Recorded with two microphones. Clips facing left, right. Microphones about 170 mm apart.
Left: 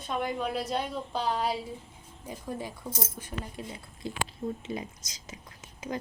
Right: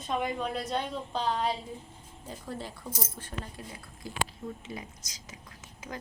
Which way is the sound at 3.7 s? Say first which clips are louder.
Left 4 dB; 25° left (ahead or behind).